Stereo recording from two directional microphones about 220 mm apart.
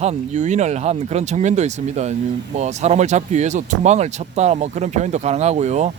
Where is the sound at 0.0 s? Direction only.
30° right (ahead or behind).